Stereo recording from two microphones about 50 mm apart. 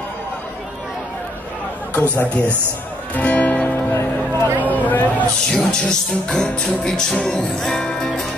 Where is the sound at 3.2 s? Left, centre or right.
Left.